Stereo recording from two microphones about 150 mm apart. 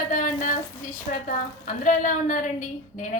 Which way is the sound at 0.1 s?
60° left (ahead or behind).